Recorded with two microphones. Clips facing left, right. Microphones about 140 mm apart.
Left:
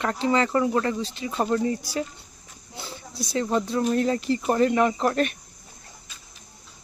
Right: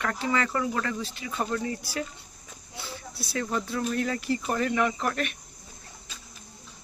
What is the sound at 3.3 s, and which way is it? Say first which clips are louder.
Speech: left 5 dB; 25° left (ahead or behind).